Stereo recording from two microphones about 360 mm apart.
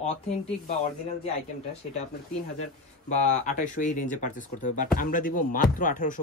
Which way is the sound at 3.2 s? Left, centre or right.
Centre.